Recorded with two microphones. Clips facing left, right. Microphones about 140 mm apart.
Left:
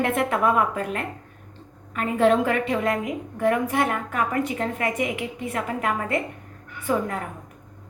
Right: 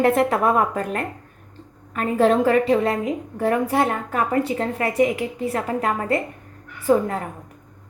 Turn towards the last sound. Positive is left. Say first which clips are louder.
# right 6 dB
turn(degrees=-35)  # may be behind; listen again after turning